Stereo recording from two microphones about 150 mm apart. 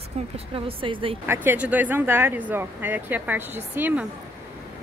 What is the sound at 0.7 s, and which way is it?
Speech, 35° right (ahead or behind).